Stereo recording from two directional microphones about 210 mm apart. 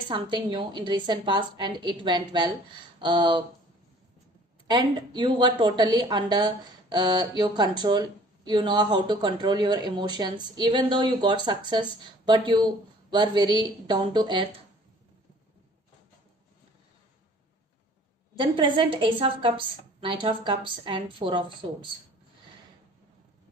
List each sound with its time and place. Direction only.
0.1 s speech: 20° right (ahead or behind)
4.6 s speech: 20° right (ahead or behind)
18.3 s a woman's voice: 25° right (ahead or behind)